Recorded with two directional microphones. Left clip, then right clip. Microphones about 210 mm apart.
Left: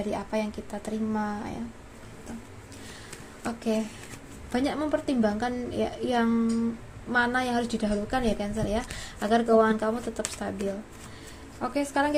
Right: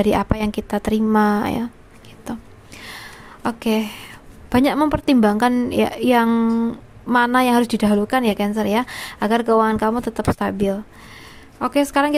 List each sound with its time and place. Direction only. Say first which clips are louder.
0.1 s speech: right 10 dB; 40° right (ahead or behind)
3.4 s speech: right 8 dB; 35° right (ahead or behind)
11.6 s speech: right 9 dB; 35° right (ahead or behind)